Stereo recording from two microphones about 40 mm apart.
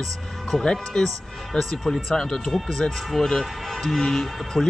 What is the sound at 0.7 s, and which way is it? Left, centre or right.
Speech, centre.